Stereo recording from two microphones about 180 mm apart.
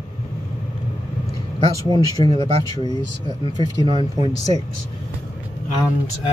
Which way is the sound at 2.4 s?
35° right (ahead or behind).